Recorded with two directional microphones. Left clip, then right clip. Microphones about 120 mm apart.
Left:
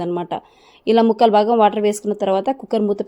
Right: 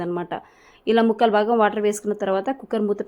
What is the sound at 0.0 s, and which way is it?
A woman's voice, 25° left (ahead or behind).